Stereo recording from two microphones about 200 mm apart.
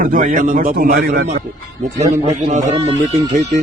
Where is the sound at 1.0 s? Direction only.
55° right (ahead or behind).